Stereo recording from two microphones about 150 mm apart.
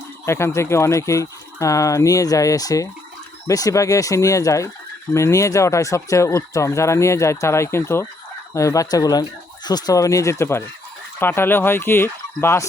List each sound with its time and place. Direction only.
0.3 s speech: 20° left (ahead or behind)